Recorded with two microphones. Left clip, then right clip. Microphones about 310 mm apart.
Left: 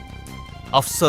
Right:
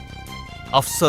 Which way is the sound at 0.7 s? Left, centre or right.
Centre.